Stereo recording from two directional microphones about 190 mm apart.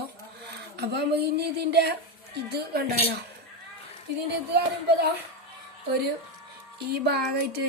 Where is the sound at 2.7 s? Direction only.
55° right (ahead or behind).